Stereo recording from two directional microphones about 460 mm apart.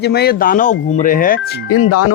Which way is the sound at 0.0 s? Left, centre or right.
Left.